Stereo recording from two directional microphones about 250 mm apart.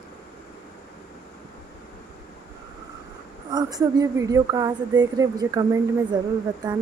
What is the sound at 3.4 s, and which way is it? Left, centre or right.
A woman's voice, centre.